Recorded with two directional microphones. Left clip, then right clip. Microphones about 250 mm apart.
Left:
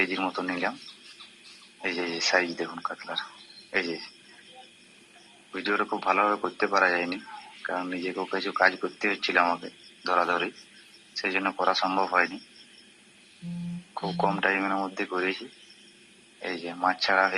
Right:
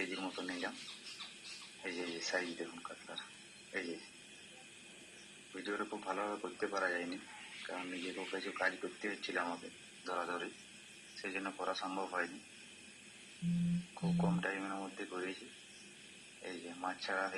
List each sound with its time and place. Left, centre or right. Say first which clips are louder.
0.0 s speech: left 14 dB; left
1.8 s a man's voice: left 14 dB; left
5.5 s speech: left 14 dB; left
13.9 s speech: left 15 dB; left
16.4 s speech: left 15 dB; left